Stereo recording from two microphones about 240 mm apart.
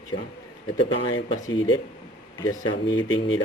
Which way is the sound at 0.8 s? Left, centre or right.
Left.